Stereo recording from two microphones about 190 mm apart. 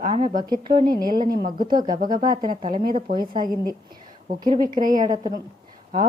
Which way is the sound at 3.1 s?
50° right (ahead or behind).